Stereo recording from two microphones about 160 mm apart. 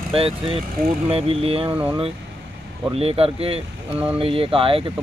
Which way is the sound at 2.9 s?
35° right (ahead or behind).